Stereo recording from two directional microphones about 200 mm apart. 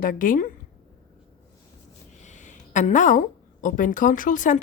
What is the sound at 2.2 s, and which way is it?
A woman's voice, 35° left (ahead or behind).